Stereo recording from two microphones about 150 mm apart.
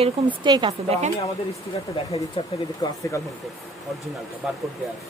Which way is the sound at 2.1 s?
40° left (ahead or behind).